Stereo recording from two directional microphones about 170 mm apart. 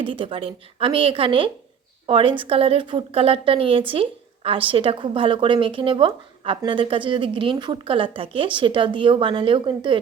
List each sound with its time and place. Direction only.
0.0 s a woman's voice: 30° right (ahead or behind)